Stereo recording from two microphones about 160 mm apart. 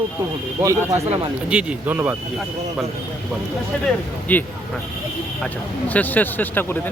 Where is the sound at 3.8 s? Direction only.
10° left (ahead or behind).